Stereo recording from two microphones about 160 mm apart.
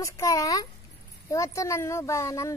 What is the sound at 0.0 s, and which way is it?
Speech, 20° left (ahead or behind).